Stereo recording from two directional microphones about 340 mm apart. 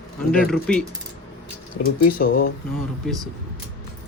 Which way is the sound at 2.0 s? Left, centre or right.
Left.